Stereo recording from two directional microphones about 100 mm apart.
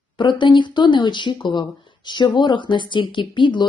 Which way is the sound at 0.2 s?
55° left (ahead or behind).